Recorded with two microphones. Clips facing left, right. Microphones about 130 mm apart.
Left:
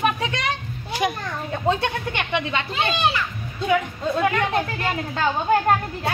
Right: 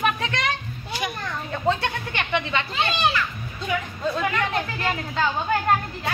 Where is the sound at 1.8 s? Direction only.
15° left (ahead or behind).